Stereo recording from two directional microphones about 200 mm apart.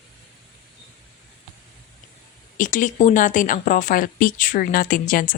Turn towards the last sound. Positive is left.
turn(degrees=45)  # may be behind; listen again after turning